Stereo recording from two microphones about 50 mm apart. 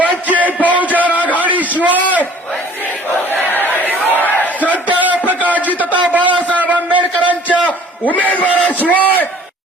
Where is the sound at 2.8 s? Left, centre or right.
Left.